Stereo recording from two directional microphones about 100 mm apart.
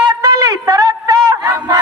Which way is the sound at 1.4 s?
25° right (ahead or behind).